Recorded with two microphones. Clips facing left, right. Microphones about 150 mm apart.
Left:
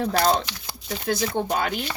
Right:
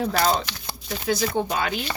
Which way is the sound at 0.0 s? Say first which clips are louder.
Left 1 dB; 50° left (ahead or behind).